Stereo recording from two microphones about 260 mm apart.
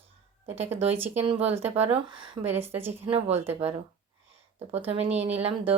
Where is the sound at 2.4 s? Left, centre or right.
Centre.